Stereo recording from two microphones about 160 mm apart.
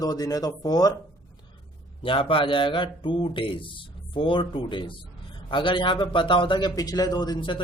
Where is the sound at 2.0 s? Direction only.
35° left (ahead or behind).